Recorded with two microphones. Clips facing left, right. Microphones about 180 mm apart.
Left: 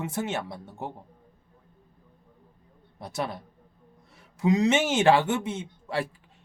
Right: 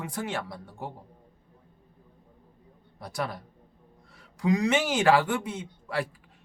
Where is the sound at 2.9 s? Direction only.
25° left (ahead or behind).